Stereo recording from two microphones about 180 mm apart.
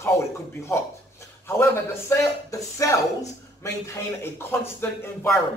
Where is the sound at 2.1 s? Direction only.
15° left (ahead or behind).